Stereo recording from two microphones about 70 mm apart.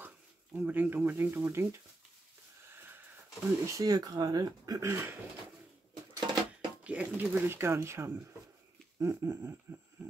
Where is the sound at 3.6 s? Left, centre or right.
Right.